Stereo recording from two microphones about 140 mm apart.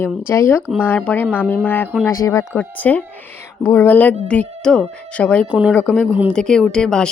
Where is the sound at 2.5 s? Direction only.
10° left (ahead or behind).